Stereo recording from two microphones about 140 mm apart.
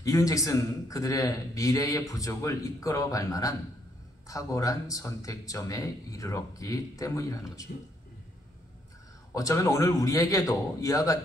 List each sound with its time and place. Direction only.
0.0 s a man's voice: 25° left (ahead or behind)
9.3 s a man's voice: 25° left (ahead or behind)